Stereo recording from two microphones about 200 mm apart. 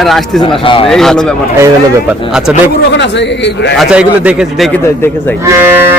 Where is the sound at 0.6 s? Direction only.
25° left (ahead or behind).